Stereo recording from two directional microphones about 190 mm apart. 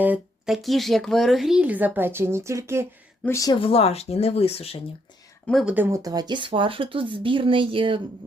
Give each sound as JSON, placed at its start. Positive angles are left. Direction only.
{"t": 0.0, "sound": "speech", "side_deg": -5}
{"t": 3.2, "sound": "speech", "side_deg": 15}
{"t": 5.5, "sound": "speech", "side_deg": 0}
{"t": 5.7, "sound": "speech", "side_deg": -15}